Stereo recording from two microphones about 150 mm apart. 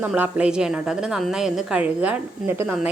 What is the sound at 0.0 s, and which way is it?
A woman's voice, 10° right (ahead or behind).